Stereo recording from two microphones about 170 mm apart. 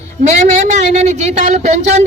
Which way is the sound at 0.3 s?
45° right (ahead or behind).